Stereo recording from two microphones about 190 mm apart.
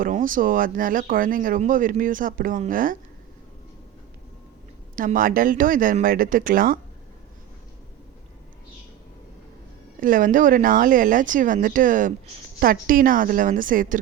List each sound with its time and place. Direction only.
0.0 s speech: 45° right (ahead or behind)
4.9 s speech: 45° right (ahead or behind)
10.0 s speech: 45° right (ahead or behind)